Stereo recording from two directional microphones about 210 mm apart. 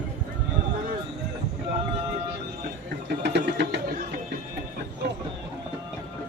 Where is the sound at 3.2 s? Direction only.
55° right (ahead or behind).